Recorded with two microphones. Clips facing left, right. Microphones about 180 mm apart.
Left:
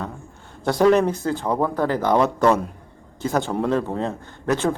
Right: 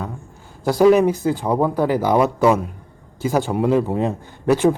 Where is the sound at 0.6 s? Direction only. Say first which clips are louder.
Right 3 dB; 5° right (ahead or behind).